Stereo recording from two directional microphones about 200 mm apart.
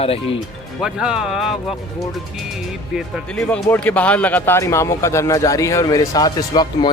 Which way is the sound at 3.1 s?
5° left (ahead or behind).